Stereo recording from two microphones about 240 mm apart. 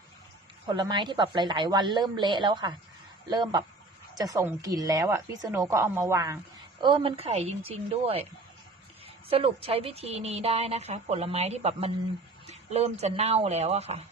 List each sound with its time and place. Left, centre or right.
0.7 s a woman's voice: centre
9.3 s a woman's voice: right